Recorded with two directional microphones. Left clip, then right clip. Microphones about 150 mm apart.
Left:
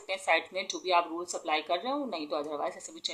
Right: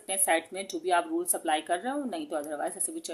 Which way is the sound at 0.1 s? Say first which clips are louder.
Even; 50° right (ahead or behind).